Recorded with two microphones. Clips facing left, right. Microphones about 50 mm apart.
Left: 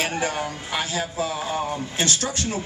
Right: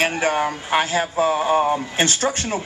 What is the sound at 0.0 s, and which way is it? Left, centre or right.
Speech, right.